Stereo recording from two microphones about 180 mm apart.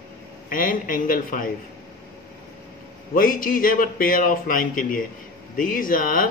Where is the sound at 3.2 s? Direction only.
50° left (ahead or behind).